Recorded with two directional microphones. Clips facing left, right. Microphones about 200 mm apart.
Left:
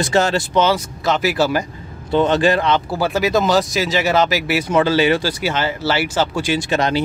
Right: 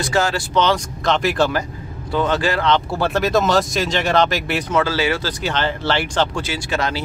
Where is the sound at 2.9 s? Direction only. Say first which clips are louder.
Left 1 dB; centre (ahead or behind); by 5.3 s 20° left (ahead or behind).